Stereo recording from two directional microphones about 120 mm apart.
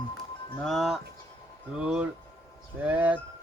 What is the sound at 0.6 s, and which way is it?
Speech, centre (ahead or behind).